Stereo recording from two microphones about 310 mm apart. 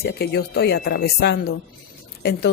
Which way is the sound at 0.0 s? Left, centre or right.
Left.